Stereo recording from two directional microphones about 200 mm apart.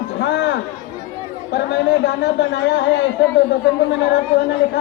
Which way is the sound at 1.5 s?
60° left (ahead or behind).